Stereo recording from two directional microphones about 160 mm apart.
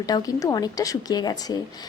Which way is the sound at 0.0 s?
25° left (ahead or behind).